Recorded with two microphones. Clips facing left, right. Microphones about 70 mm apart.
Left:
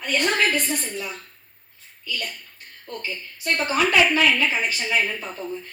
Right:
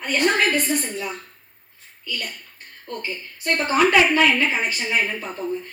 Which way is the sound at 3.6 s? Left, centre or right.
Right.